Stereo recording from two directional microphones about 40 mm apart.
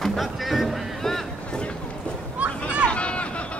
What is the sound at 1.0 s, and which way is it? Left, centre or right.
Boat, centre.